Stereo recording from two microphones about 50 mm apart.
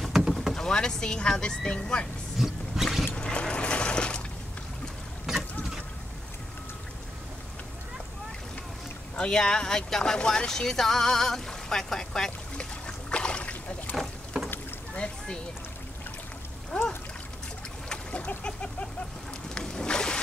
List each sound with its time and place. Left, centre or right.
0.0 s vehicle: centre
0.6 s speech: centre
2.3 s a sound: centre
3.2 s a sound: centre
5.3 s boat: centre
9.1 s speech: centre
12.5 s trickle: centre
13.9 s boat: centre
16.7 s a sound: centre
17.8 s splash: left
18.4 s a sound: left
19.5 s boat: centre